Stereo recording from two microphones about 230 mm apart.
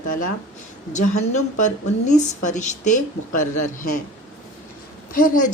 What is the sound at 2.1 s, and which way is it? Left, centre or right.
Speech, left.